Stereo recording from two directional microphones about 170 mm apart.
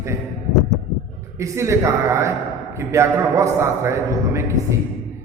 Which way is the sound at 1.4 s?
15° right (ahead or behind).